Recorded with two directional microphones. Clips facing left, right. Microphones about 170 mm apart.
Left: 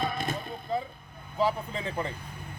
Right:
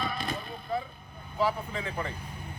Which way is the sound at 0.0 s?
50° left (ahead or behind).